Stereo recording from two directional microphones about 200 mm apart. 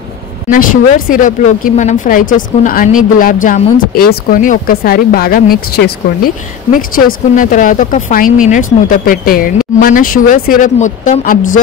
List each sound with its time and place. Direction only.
0.5 s speech: 45° left (ahead or behind)